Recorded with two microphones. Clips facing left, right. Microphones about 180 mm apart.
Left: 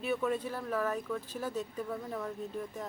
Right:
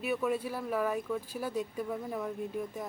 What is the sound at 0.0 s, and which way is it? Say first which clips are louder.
A woman's voice: right 1 dB; 10° right (ahead or behind).